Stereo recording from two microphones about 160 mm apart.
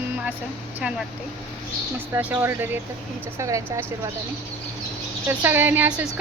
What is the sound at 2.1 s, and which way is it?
A woman's voice, 10° right (ahead or behind).